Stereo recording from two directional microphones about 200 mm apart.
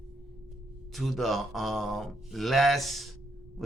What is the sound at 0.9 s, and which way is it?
A man's voice, centre (ahead or behind).